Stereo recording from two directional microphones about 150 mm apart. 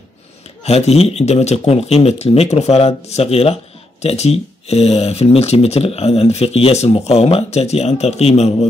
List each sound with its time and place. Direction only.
0.7 s speech: 45° left (ahead or behind)